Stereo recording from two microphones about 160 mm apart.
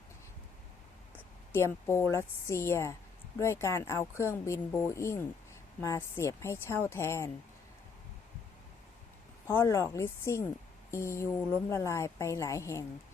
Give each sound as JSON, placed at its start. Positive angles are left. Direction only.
{"t": 1.1, "sound": "a woman's voice", "side_deg": 15}
{"t": 9.5, "sound": "speech", "side_deg": 20}